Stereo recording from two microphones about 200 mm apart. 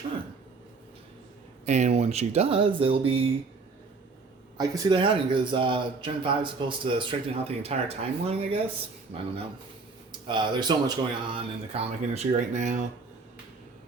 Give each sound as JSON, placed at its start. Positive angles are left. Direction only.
{"t": 1.6, "sound": "a man's voice", "side_deg": -35}
{"t": 4.5, "sound": "a man's voice", "side_deg": -15}